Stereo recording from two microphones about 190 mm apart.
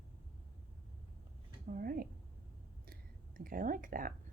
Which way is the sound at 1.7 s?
50° right (ahead or behind).